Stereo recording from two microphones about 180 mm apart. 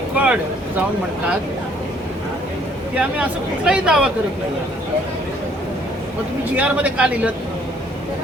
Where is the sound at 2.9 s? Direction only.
5° right (ahead or behind).